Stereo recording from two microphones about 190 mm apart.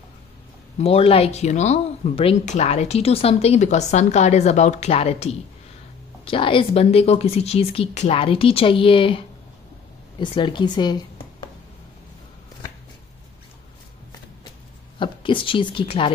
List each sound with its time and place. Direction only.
0.7 s a woman's voice: 30° left (ahead or behind)
10.2 s a woman's voice: 25° left (ahead or behind)
15.0 s a woman's voice: 25° left (ahead or behind)